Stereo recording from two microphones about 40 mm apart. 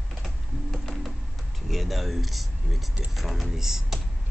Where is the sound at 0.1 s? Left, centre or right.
Centre.